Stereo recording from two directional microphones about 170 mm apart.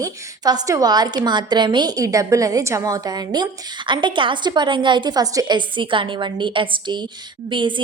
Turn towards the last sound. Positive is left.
turn(degrees=-30)  # may be behind; listen again after turning